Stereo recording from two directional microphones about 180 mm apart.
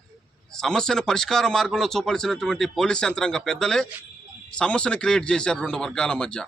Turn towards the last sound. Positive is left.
turn(degrees=5)  # may be behind; listen again after turning